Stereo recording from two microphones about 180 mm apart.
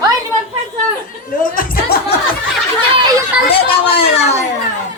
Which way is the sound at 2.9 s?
25° right (ahead or behind).